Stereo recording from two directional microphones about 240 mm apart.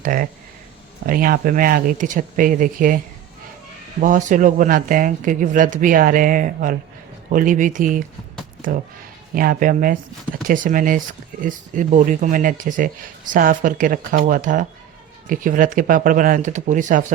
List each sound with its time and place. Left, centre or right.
0.0 s speech: right
4.0 s speech: right
9.3 s speech: right